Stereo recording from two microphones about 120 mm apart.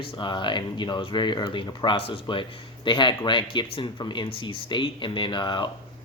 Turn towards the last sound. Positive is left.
turn(degrees=40)  # may be behind; listen again after turning